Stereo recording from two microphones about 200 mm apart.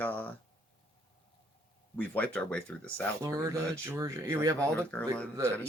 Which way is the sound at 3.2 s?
15° right (ahead or behind).